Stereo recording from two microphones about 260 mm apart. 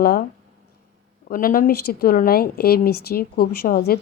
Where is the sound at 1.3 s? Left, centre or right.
Left.